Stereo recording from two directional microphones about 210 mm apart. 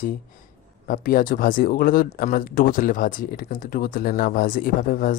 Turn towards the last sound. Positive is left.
turn(degrees=40)  # may be behind; listen again after turning